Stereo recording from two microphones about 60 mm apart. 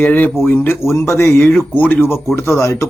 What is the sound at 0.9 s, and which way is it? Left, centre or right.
Speech, left.